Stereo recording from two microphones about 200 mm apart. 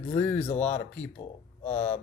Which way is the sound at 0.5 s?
10° left (ahead or behind).